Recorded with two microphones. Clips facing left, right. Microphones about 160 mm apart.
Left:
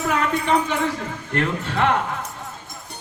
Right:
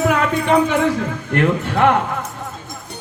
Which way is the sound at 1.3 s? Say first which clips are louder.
Right 6 dB; 55° right (ahead or behind).